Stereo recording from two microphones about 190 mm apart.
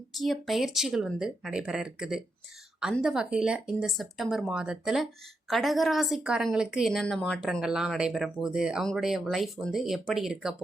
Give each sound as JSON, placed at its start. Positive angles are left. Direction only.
{"t": 0.1, "sound": "a woman's voice", "side_deg": 0}